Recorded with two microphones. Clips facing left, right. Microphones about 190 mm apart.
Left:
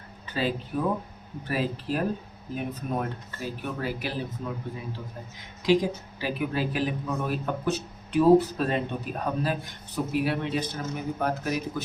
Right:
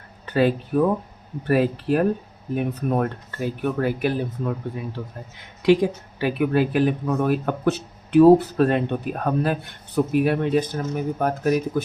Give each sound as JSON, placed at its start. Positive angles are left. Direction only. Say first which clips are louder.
{"t": 0.3, "sound": "speech", "louder": "right 9 dB", "side_deg": -60}